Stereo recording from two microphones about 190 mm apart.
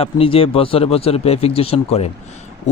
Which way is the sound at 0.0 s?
30° left (ahead or behind).